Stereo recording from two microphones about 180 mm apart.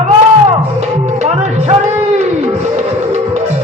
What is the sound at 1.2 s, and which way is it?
Music, 40° right (ahead or behind).